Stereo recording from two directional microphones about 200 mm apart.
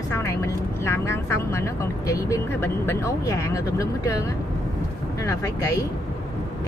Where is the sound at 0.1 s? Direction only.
15° left (ahead or behind).